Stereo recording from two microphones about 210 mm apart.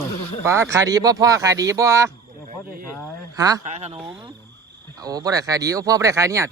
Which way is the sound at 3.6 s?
30° right (ahead or behind).